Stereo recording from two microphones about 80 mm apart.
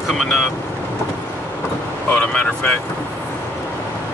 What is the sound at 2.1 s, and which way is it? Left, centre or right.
Speech, centre.